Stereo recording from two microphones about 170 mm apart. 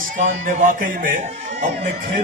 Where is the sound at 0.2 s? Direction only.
45° right (ahead or behind).